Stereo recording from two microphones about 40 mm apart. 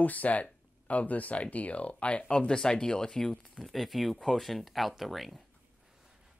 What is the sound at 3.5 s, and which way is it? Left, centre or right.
Speech, centre.